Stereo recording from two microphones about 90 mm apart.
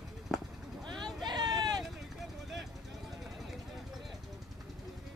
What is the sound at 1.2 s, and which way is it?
Vehicle, 50° right (ahead or behind).